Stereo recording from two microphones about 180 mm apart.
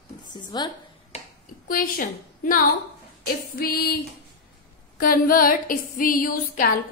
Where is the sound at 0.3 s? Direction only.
25° left (ahead or behind).